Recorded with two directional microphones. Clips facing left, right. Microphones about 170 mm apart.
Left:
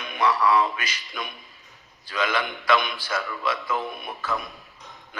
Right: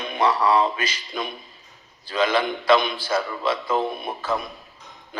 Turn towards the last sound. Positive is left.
turn(degrees=-25)  # may be behind; listen again after turning